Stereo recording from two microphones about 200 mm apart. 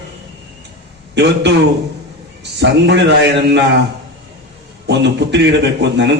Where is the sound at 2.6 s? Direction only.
60° right (ahead or behind).